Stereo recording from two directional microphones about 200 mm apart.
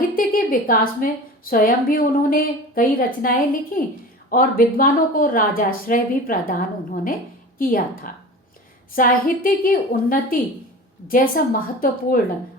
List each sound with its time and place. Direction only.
0.2 s a woman's voice: 45° left (ahead or behind)